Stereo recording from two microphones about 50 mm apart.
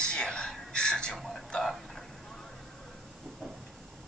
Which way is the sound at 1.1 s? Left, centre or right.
Centre.